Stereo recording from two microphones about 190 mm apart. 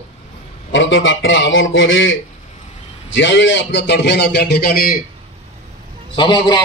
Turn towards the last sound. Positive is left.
turn(degrees=25)  # may be behind; listen again after turning